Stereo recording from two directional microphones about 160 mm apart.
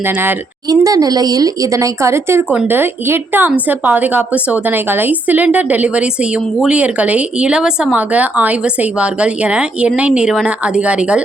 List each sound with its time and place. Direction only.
0.0 s a woman's voice: 15° right (ahead or behind)
0.7 s a woman's voice: 25° right (ahead or behind); by 11.2 s 5° right (ahead or behind)